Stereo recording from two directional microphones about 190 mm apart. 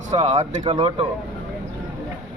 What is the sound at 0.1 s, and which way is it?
Speech, 35° right (ahead or behind).